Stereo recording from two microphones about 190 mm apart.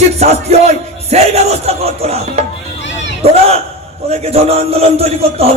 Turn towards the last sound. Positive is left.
turn(degrees=-30)  # may be behind; listen again after turning